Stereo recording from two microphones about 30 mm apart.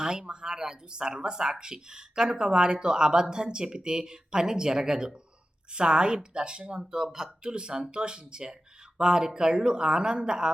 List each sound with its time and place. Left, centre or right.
0.0 s speech: right
7.0 s speech: right